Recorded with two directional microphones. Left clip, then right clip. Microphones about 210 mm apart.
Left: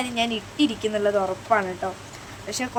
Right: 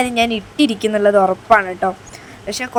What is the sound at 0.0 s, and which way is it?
A woman's voice, 30° right (ahead or behind).